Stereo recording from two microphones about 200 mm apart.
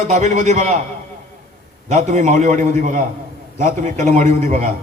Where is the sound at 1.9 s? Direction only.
35° right (ahead or behind).